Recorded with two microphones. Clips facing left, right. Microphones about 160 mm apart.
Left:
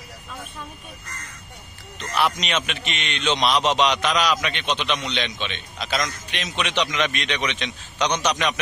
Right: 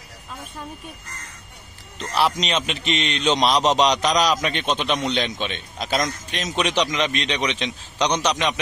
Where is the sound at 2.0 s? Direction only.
35° right (ahead or behind).